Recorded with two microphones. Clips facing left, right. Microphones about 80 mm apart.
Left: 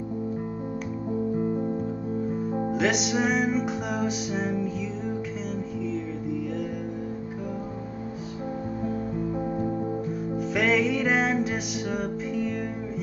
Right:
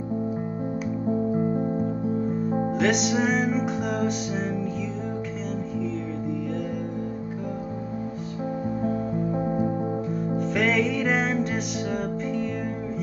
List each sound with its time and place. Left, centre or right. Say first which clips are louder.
1.4 s music: right 2 dB; right
2.7 s music: right 1 dB; centre
10.3 s music: even; centre